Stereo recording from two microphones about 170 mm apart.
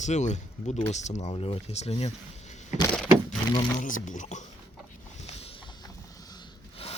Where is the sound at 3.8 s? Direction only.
50° left (ahead or behind).